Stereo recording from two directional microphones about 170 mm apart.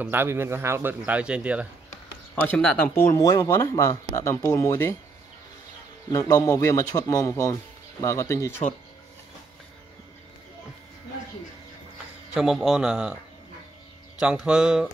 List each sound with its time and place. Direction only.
0.0 s speech: 15° right (ahead or behind)
2.4 s a man's voice: 10° left (ahead or behind)
3.2 s a man's voice: 20° left (ahead or behind)
6.1 s a man's voice: 20° left (ahead or behind)
12.4 s a man's voice: centre (ahead or behind)
14.2 s a man's voice: 5° right (ahead or behind)